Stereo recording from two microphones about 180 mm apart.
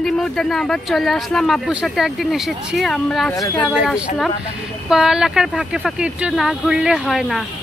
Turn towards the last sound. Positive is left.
turn(degrees=0)  # may be behind; listen again after turning